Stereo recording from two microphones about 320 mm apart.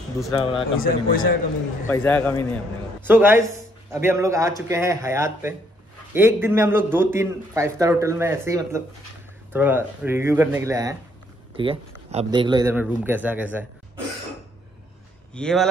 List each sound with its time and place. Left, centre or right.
0.3 s a man's voice: centre
0.7 s speech: left
1.9 s a man's voice: centre
3.0 s a man's voice: centre
15.3 s speech: centre